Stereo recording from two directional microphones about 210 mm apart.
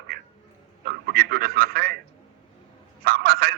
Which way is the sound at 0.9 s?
45° right (ahead or behind).